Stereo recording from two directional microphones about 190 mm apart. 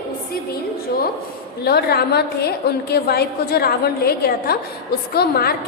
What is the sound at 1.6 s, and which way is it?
A woman's voice, 55° left (ahead or behind).